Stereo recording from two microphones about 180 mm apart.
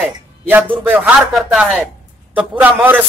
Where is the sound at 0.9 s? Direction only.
5° right (ahead or behind).